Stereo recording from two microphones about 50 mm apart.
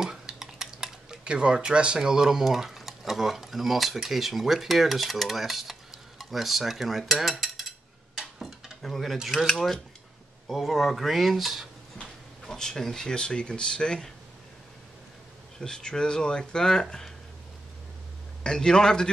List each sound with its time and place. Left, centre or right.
0.0 s cutlery: centre
8.8 s speech: centre
12.0 s speech: centre
15.6 s speech: centre
18.4 s speech: centre